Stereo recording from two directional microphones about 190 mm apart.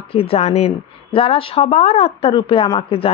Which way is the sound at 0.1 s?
30° left (ahead or behind).